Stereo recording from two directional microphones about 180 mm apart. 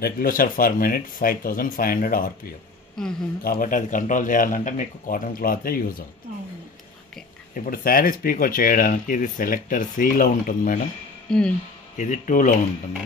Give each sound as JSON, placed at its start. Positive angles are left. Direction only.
{"t": 0.0, "sound": "speech", "side_deg": 55}
{"t": 3.0, "sound": "speech", "side_deg": 5}
{"t": 3.4, "sound": "speech", "side_deg": 50}
{"t": 7.5, "sound": "speech", "side_deg": 50}
{"t": 11.2, "sound": "speech", "side_deg": 5}
{"t": 12.0, "sound": "speech", "side_deg": 45}